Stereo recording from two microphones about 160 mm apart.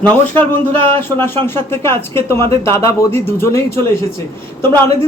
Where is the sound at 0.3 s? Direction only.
10° left (ahead or behind).